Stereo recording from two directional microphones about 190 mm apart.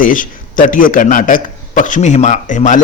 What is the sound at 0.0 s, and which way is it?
A man's voice, 45° left (ahead or behind).